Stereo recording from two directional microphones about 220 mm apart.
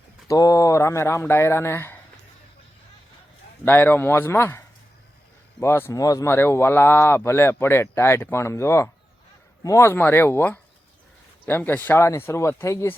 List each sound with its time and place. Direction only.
0.3 s speech: 15° left (ahead or behind)
3.7 s speech: 10° left (ahead or behind)